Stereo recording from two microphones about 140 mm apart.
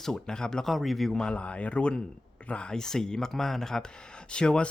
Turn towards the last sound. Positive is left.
turn(degrees=5)  # may be behind; listen again after turning